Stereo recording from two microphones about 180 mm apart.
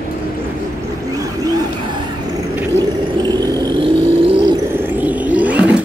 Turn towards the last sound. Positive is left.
turn(degrees=-10)  # may be behind; listen again after turning